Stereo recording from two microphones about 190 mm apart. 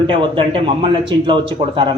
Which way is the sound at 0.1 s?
25° right (ahead or behind).